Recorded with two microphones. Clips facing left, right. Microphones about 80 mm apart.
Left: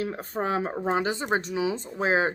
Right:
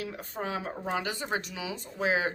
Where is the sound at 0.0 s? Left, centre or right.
Left.